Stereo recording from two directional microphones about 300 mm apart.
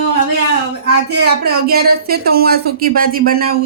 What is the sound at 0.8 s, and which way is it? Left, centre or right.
Speech, right.